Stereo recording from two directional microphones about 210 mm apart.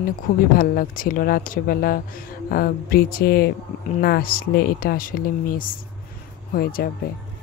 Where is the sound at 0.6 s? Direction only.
45° left (ahead or behind).